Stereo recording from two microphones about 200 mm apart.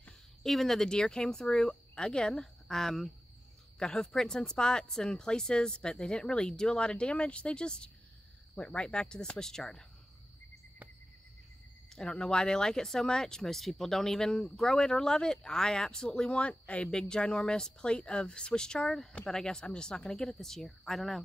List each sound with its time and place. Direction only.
0.0 s speech: centre (ahead or behind)
11.9 s speech: 5° left (ahead or behind)